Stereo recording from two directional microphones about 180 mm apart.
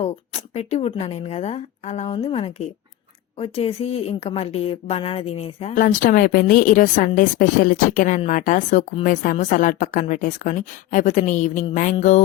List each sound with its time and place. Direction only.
0.0 s speech: 35° left (ahead or behind)
5.7 s a woman's voice: 45° left (ahead or behind)